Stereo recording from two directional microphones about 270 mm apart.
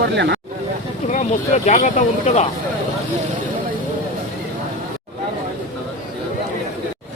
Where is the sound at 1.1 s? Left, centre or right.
Left.